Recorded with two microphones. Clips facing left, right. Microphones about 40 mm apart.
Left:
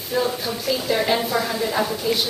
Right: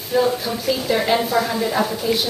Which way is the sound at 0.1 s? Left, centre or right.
Centre.